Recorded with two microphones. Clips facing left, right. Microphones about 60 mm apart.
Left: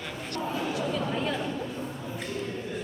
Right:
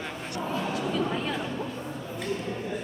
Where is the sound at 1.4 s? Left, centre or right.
Centre.